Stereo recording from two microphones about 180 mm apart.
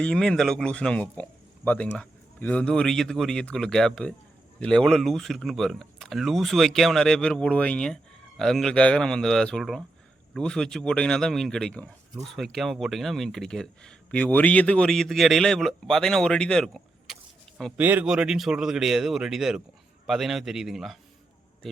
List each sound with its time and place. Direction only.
0.0 s speech: 5° left (ahead or behind)
17.7 s speech: 10° right (ahead or behind)